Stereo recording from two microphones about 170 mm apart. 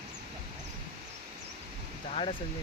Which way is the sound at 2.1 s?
35° left (ahead or behind).